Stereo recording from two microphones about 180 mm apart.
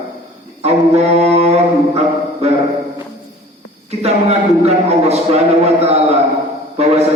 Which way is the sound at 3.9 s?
35° right (ahead or behind).